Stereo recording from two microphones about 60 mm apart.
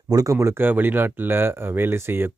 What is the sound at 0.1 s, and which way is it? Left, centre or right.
Speech, right.